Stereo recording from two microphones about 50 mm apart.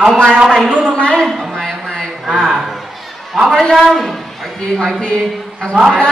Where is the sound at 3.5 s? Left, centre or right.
Centre.